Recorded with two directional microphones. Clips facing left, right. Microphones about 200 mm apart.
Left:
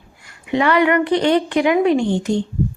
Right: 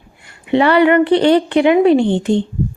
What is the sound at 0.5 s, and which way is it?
Speech, 30° right (ahead or behind).